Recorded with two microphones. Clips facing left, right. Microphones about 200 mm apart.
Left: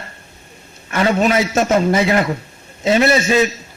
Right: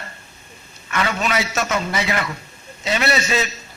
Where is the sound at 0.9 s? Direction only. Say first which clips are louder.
Left 6 dB; 30° left (ahead or behind).